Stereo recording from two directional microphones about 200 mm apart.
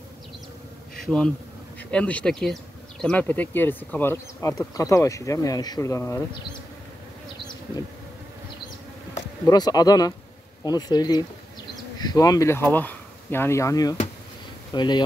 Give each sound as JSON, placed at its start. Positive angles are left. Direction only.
{"t": 0.9, "sound": "speech", "side_deg": 5}
{"t": 9.1, "sound": "speech", "side_deg": 20}